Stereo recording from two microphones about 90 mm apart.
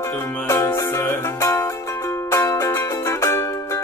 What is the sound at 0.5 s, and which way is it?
Music, 25° left (ahead or behind).